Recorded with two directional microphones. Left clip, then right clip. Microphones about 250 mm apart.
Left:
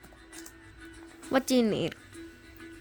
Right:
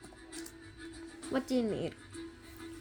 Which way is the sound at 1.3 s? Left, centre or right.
Left.